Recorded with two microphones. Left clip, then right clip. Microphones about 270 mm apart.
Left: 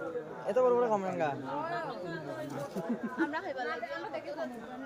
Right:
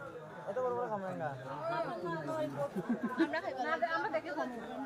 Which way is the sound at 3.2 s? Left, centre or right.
Centre.